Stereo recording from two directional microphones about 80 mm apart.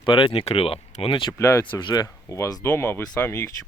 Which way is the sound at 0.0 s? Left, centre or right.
Left.